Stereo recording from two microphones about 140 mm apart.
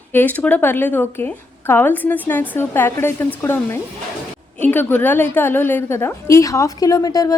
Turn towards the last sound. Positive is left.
turn(degrees=25)  # may be behind; listen again after turning